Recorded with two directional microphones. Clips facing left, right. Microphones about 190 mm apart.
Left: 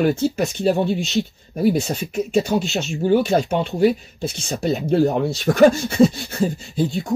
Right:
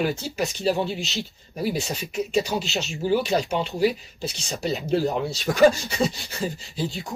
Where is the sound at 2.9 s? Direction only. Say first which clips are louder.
Left 5 dB; 55° left (ahead or behind).